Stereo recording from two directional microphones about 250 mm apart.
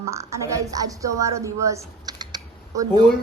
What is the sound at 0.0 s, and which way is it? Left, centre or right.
A woman's voice, centre.